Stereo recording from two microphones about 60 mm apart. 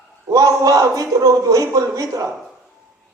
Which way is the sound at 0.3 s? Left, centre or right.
Right.